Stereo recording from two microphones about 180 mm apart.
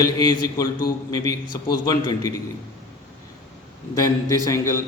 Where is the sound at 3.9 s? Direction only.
20° left (ahead or behind).